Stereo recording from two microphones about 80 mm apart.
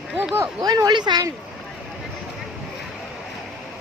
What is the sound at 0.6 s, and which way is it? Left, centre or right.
Speech, right.